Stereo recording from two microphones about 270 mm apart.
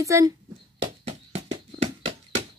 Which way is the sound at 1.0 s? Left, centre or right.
Right.